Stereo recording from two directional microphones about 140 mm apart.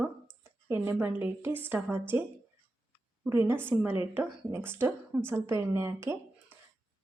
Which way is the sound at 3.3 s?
15° right (ahead or behind).